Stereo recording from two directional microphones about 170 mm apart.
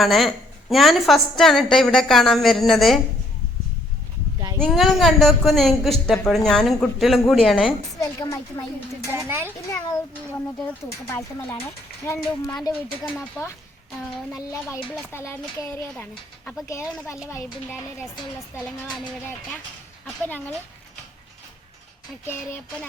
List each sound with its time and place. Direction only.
0.0 s a woman's voice: centre (ahead or behind)
4.5 s a woman's voice: 5° left (ahead or behind)
8.0 s speech: 20° left (ahead or behind)
9.1 s a child's voice: 15° right (ahead or behind)
9.6 s speech: 20° left (ahead or behind)
14.8 s speech: 5° left (ahead or behind)
18.6 s a woman's voice: 5° left (ahead or behind)
22.3 s speech: 10° left (ahead or behind)